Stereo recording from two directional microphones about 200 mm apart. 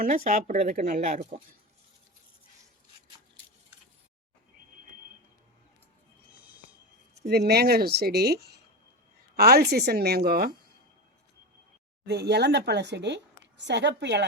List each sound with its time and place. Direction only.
0.0 s speech: 40° right (ahead or behind)
7.2 s speech: 55° right (ahead or behind)
12.0 s speech: 55° right (ahead or behind)